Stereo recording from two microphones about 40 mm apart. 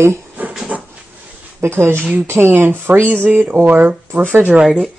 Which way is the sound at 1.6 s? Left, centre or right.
Right.